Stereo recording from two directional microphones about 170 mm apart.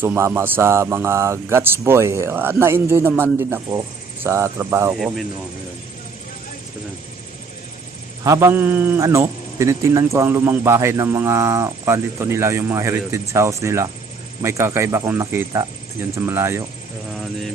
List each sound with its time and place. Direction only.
0.0 s a man's voice: 10° right (ahead or behind)
4.9 s speech: centre (ahead or behind)
8.2 s a man's voice: 20° right (ahead or behind)